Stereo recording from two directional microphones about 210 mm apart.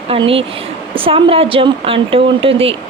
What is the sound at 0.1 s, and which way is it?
A woman's voice, 25° right (ahead or behind).